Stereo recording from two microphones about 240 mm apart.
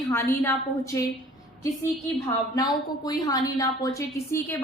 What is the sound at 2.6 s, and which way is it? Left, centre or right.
A woman's voice, centre.